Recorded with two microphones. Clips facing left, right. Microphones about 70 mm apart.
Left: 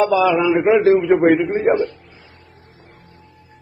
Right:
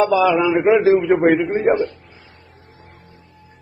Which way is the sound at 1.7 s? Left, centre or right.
Right.